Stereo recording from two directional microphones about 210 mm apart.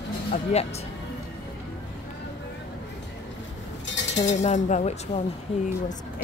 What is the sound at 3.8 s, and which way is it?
Chink, 60° left (ahead or behind).